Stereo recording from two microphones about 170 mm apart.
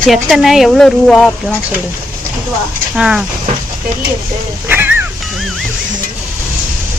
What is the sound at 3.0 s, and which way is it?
Speech, 5° right (ahead or behind).